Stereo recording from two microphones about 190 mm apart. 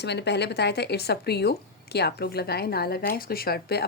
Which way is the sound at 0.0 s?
65° left (ahead or behind).